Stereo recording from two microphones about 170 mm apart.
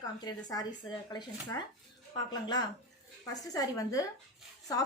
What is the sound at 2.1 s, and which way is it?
A woman's voice, 25° left (ahead or behind).